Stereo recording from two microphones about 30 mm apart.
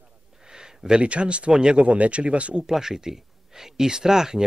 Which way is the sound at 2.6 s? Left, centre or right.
Centre.